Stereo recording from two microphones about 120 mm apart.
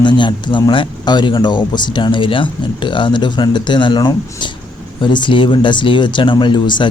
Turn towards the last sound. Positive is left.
turn(degrees=40)  # may be behind; listen again after turning